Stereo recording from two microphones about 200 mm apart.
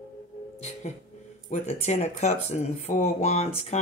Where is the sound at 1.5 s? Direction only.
35° left (ahead or behind).